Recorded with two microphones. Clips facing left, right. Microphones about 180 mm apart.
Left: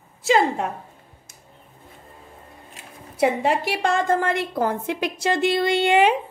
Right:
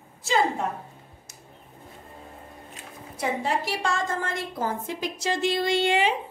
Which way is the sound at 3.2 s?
65° left (ahead or behind).